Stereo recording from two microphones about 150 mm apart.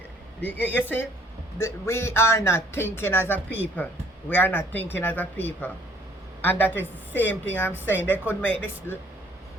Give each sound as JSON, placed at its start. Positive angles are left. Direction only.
{"t": 0.4, "sound": "a woman's voice", "side_deg": 10}